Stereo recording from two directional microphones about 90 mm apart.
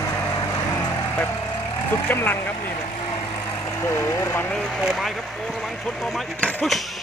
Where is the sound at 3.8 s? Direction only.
35° left (ahead or behind).